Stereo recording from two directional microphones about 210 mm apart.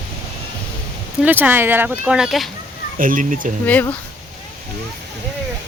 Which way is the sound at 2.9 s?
40° right (ahead or behind).